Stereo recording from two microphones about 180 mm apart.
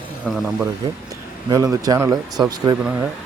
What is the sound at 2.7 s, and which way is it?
Speech, 10° right (ahead or behind).